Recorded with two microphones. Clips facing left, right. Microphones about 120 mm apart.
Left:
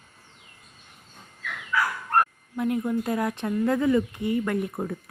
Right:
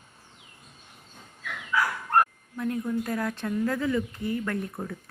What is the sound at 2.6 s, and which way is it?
A woman's voice, 20° left (ahead or behind).